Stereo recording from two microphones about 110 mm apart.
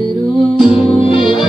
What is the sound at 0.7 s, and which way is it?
Music, 55° left (ahead or behind).